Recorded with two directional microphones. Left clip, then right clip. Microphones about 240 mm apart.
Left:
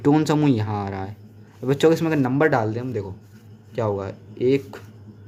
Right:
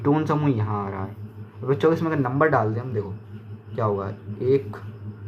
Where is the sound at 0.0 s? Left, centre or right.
Left.